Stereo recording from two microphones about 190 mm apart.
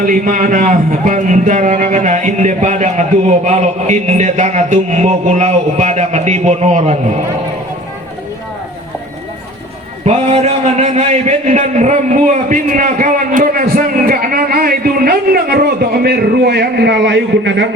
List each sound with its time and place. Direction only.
0.0 s speech: 45° right (ahead or behind)
10.1 s a man's voice: 35° right (ahead or behind); by 17.7 s 65° right (ahead or behind)